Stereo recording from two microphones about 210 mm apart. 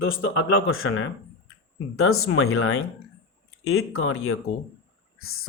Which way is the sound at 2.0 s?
90° left.